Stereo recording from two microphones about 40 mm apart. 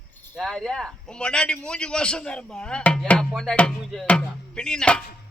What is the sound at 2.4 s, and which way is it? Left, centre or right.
Chopping, centre.